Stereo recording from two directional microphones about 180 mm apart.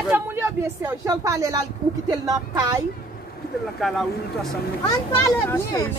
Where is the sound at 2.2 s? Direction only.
20° right (ahead or behind).